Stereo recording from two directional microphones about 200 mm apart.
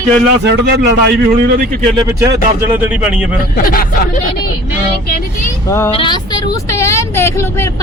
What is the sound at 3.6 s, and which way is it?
Speech, 45° left (ahead or behind).